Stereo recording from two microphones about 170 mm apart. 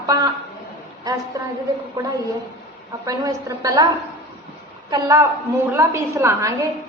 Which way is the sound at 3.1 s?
20° right (ahead or behind).